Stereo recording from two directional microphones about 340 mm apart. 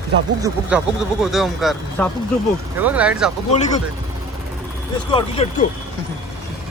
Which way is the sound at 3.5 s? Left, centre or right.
Centre.